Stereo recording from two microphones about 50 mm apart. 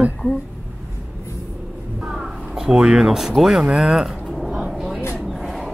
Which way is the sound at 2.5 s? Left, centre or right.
Centre.